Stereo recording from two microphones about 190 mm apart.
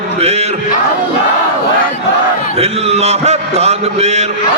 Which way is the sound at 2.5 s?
35° right (ahead or behind).